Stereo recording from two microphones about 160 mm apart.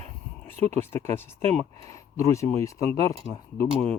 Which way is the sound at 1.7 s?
20° left (ahead or behind).